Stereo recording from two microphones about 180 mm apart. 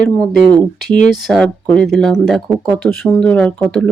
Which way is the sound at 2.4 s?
20° right (ahead or behind).